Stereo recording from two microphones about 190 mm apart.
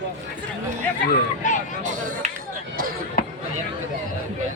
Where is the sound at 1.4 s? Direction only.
40° left (ahead or behind).